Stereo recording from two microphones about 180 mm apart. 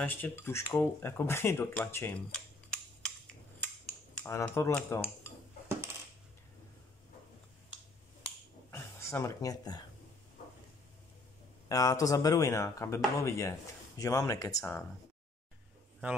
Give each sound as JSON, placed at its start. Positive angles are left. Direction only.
{"t": 0.0, "sound": "speech", "side_deg": 10}
{"t": 3.6, "sound": "dishes", "side_deg": 10}
{"t": 8.6, "sound": "a sound", "side_deg": 15}
{"t": 11.7, "sound": "speech", "side_deg": 20}